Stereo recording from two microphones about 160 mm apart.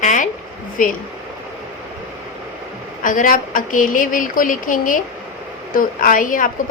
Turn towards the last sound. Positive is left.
turn(degrees=55)  # may be behind; listen again after turning